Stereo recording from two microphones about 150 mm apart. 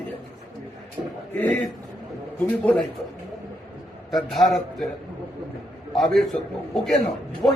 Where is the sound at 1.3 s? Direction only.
10° left (ahead or behind).